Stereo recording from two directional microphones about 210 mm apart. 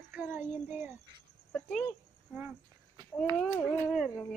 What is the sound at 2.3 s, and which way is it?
A woman's voice, 5° right (ahead or behind).